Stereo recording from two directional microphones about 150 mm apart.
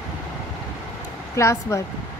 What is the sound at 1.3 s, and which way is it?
Speech, 20° left (ahead or behind).